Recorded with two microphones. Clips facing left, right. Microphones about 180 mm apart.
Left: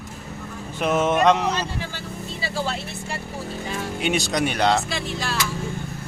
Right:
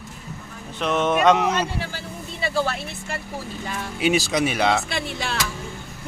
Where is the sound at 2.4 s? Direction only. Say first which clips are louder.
Right 4 dB; 55° right (ahead or behind).